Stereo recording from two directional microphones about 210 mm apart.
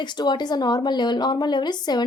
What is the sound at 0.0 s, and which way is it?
Speech, 20° left (ahead or behind).